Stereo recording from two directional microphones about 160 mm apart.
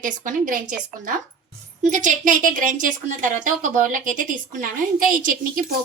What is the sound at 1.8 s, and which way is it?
A woman's voice, 50° right (ahead or behind).